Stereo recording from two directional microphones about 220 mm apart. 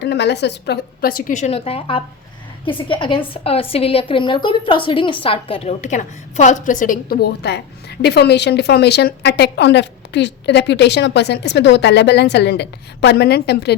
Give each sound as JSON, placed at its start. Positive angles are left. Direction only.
{"t": 0.0, "sound": "a woman's voice", "side_deg": 50}